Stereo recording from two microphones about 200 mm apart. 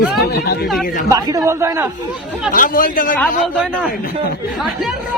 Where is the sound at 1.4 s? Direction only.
15° right (ahead or behind).